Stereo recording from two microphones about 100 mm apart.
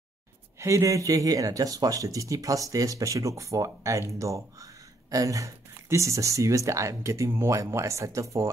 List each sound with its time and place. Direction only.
0.6 s speech: 30° right (ahead or behind)